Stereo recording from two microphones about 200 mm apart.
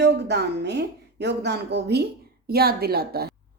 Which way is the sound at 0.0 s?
55° right (ahead or behind).